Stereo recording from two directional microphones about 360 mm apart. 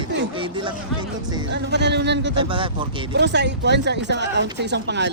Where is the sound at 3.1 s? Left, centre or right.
Right.